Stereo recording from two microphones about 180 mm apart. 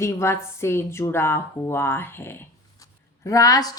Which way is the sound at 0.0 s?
15° left (ahead or behind).